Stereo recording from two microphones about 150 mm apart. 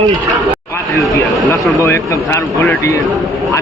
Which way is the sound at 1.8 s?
20° left (ahead or behind).